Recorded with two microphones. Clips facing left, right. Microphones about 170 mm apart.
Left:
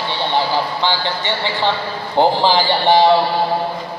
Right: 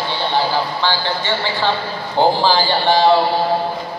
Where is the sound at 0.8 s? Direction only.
20° left (ahead or behind).